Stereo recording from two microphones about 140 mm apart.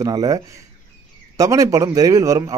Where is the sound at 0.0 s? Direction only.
25° right (ahead or behind).